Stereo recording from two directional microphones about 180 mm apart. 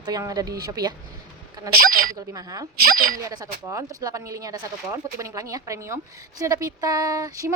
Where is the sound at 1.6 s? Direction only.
20° right (ahead or behind).